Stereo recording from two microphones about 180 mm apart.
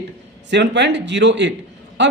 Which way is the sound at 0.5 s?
75° right (ahead or behind).